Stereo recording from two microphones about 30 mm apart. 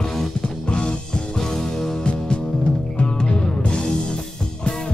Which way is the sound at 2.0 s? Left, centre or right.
Left.